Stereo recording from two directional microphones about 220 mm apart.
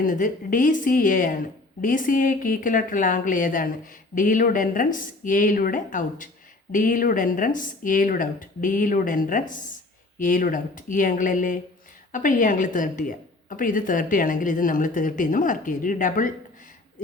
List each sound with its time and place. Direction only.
0.0 s a woman's voice: 35° left (ahead or behind)